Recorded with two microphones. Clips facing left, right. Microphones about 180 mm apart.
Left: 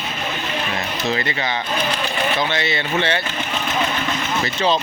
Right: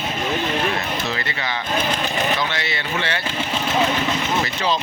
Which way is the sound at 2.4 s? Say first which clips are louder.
Left 4 dB; 20° left (ahead or behind).